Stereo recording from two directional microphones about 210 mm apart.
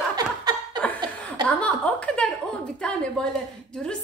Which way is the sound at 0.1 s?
20° right (ahead or behind).